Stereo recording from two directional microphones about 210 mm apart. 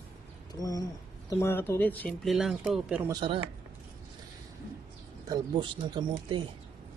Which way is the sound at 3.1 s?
25° right (ahead or behind).